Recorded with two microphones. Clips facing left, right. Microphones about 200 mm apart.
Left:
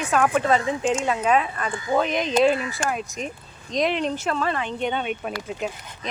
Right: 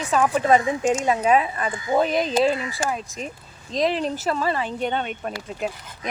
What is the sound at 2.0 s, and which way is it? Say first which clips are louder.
Speech: right 2 dB; 35° right (ahead or behind).